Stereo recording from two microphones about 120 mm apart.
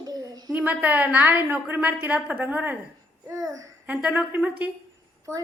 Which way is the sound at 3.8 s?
10° right (ahead or behind).